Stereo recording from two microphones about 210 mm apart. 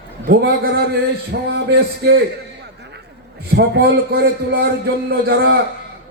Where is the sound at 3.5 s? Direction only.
50° right (ahead or behind).